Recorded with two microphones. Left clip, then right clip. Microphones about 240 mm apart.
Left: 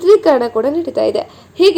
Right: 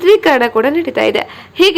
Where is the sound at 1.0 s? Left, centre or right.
Centre.